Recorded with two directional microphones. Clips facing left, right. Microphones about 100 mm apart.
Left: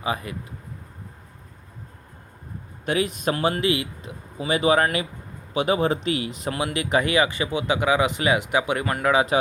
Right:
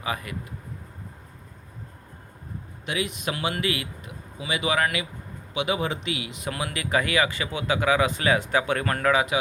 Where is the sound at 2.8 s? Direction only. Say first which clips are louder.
Left 6 dB; 40° left (ahead or behind).